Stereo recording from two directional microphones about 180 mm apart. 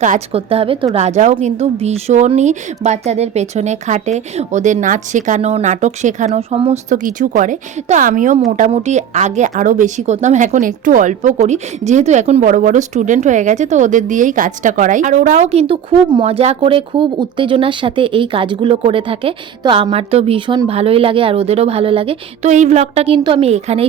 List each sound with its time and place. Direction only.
0.0 s speech: 40° right (ahead or behind)
6.9 s a woman's voice: 45° right (ahead or behind)